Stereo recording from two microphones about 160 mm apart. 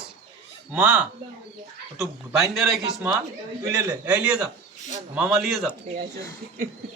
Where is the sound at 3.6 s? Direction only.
20° right (ahead or behind).